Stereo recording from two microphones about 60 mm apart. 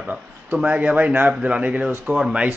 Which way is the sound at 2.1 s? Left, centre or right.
Centre.